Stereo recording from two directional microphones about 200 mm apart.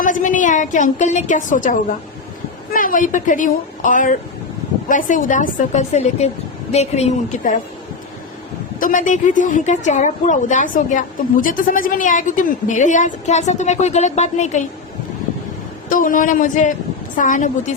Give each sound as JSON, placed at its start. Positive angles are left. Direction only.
{"t": 0.0, "sound": "a woman's voice", "side_deg": 40}
{"t": 8.8, "sound": "a woman's voice", "side_deg": 40}
{"t": 15.9, "sound": "a woman's voice", "side_deg": 45}